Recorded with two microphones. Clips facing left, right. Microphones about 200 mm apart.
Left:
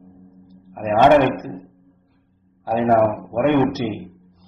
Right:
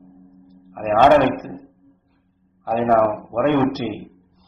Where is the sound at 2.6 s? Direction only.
15° left (ahead or behind).